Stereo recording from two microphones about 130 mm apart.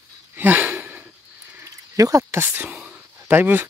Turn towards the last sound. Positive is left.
turn(degrees=-15)  # may be behind; listen again after turning